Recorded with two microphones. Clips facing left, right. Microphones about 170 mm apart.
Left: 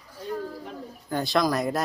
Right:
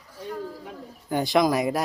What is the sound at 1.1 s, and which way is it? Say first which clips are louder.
Speech: right 3 dB; 15° right (ahead or behind).